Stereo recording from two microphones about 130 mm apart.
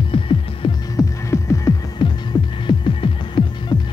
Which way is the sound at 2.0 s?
35° left (ahead or behind).